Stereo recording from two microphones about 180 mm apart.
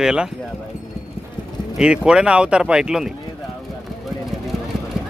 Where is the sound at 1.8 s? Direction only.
5° right (ahead or behind).